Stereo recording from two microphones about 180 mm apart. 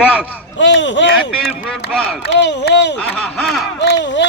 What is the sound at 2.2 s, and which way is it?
Speech, 75° left (ahead or behind).